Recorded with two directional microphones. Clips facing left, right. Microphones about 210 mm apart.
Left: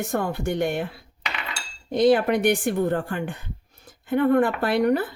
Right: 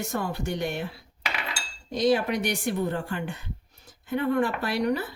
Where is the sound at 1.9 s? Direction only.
55° left (ahead or behind).